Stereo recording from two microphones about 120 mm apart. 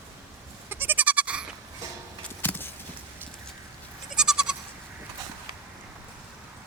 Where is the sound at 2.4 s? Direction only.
15° left (ahead or behind).